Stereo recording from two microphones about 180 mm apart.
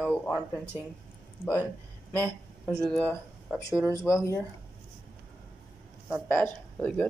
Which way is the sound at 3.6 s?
20° left (ahead or behind).